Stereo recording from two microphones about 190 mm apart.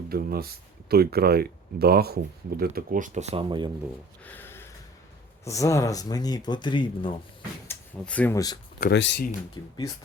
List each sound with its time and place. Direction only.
0.1 s speech: 55° right (ahead or behind); by 3.7 s 25° right (ahead or behind)
4.2 s a sound: 10° left (ahead or behind)
5.5 s speech: 15° left (ahead or behind)
7.7 s speech: 5° left (ahead or behind)
8.9 s speech: 65° left (ahead or behind)
9.6 s speech: 20° left (ahead or behind)